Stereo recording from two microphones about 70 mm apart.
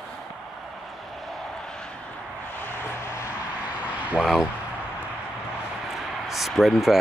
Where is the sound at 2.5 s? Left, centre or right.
Left.